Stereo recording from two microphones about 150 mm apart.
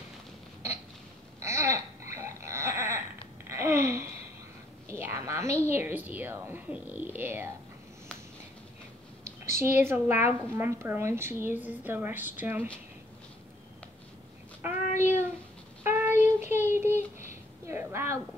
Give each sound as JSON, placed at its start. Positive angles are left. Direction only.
{"t": 1.4, "sound": "goat", "side_deg": -20}
{"t": 3.4, "sound": "babbling", "side_deg": -20}
{"t": 4.8, "sound": "a sound", "side_deg": -20}
{"t": 5.7, "sound": "a woman's voice", "side_deg": -15}
{"t": 9.2, "sound": "a woman's voice", "side_deg": -15}
{"t": 14.9, "sound": "child singing", "side_deg": 50}
{"t": 15.8, "sound": "child singing", "side_deg": -15}
{"t": 17.2, "sound": "a sound", "side_deg": -15}